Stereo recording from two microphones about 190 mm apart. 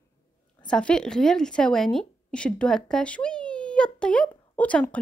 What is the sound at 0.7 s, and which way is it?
A woman's voice, 5° left (ahead or behind).